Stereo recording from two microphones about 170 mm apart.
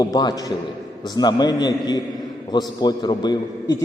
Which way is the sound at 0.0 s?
20° left (ahead or behind).